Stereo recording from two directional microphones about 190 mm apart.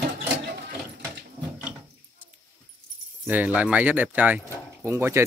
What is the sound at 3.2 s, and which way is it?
Speech, 10° right (ahead or behind).